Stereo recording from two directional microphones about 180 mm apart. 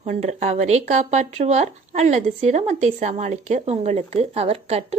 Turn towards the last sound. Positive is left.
turn(degrees=-35)  # may be behind; listen again after turning